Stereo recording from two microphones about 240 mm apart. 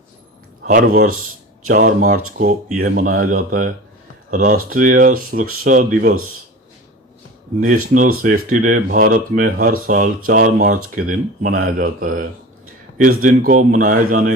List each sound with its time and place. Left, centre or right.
0.7 s speech: right
7.9 s speech: right